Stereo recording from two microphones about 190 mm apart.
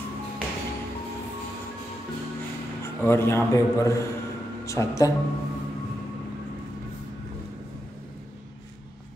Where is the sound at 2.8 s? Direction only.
15° left (ahead or behind).